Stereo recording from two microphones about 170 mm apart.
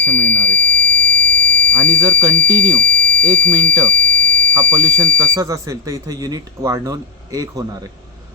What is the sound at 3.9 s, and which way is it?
Fire alarm, 5° left (ahead or behind).